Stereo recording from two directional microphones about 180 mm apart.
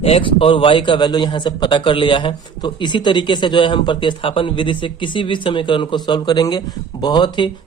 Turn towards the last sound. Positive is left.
turn(degrees=25)  # may be behind; listen again after turning